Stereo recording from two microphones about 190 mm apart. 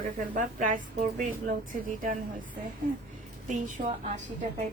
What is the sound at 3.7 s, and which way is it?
Speech, 40° right (ahead or behind).